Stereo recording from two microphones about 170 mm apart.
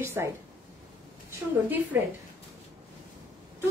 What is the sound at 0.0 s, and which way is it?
Speech, 15° right (ahead or behind).